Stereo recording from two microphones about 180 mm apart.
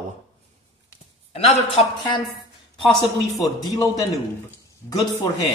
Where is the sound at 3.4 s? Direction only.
20° left (ahead or behind).